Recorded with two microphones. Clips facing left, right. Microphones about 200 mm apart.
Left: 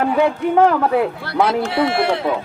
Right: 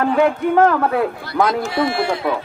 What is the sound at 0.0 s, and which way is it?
Speech, 10° left (ahead or behind).